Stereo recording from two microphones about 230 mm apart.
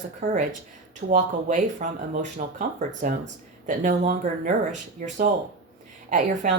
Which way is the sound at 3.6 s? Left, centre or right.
Right.